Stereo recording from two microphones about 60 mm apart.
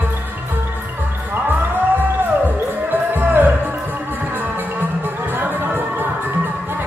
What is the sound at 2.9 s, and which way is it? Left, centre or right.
Music, right.